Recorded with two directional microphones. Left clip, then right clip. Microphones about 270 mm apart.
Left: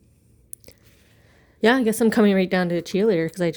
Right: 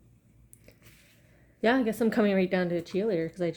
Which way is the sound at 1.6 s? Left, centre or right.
Left.